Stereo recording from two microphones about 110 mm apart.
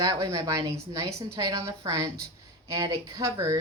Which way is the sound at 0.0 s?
35° right (ahead or behind).